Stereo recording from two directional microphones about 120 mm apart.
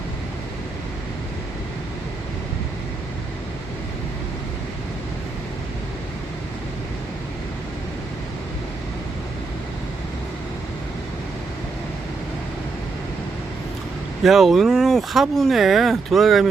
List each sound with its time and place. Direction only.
14.3 s speech: centre (ahead or behind)